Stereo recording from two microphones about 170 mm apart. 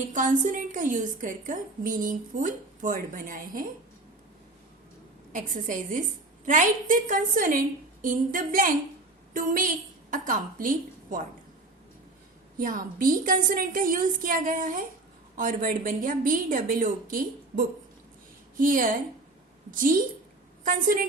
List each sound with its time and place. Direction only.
0.1 s a woman's voice: 50° right (ahead or behind)
5.3 s a woman's voice: 50° right (ahead or behind)
12.5 s a woman's voice: 55° right (ahead or behind)